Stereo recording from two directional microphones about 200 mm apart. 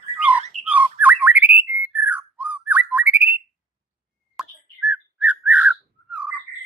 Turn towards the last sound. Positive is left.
turn(degrees=-5)  # may be behind; listen again after turning